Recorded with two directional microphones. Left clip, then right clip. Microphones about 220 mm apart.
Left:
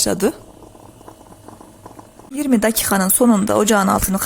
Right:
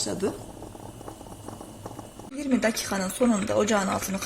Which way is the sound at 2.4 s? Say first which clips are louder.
Left 8 dB; 45° left (ahead or behind).